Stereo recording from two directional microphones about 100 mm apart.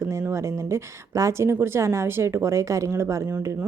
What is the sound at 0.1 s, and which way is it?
Speech, 25° right (ahead or behind).